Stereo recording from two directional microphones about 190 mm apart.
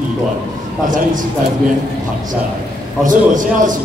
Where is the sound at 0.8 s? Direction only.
45° right (ahead or behind).